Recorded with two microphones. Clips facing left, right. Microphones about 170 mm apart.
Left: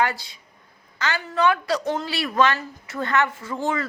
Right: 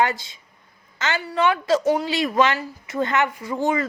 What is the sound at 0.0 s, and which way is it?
A woman's voice, 20° right (ahead or behind).